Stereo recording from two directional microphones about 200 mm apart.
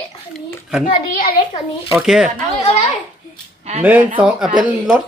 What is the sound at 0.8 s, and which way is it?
Speech, 45° left (ahead or behind).